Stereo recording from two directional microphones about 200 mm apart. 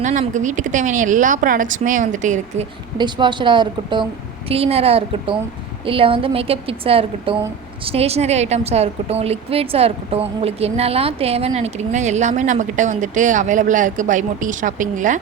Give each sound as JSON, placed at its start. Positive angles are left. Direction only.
{"t": 0.0, "sound": "a woman's voice", "side_deg": -40}
{"t": 3.0, "sound": "a woman's voice", "side_deg": -25}